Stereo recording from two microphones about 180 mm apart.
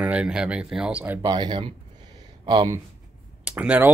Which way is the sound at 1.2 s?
25° right (ahead or behind).